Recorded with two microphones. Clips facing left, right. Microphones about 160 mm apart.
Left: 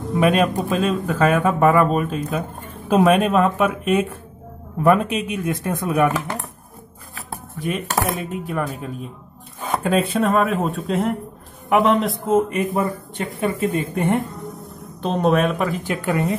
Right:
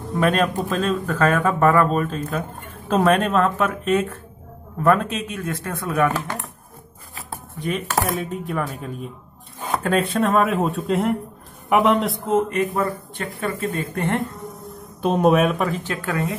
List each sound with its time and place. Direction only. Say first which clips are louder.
0.1 s speech: left 2 dB; 10° left (ahead or behind)
8.2 s speech: left 1 dB; centre (ahead or behind)
12.4 s speech: left 1 dB; 15° left (ahead or behind)
14.3 s a sound: left 1 dB; centre (ahead or behind)
15.8 s speech: left 3 dB; 15° left (ahead or behind)